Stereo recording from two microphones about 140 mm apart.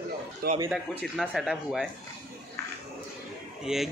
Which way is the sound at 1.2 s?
Centre (ahead or behind).